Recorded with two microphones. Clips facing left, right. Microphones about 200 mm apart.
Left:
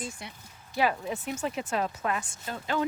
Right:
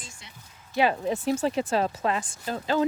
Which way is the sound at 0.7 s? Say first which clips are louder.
Right 4 dB; 30° right (ahead or behind).